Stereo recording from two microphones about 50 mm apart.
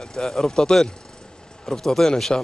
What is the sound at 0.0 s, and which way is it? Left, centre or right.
A woman's voice, centre.